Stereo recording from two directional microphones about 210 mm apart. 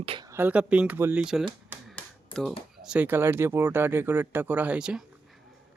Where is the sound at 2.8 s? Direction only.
5° right (ahead or behind).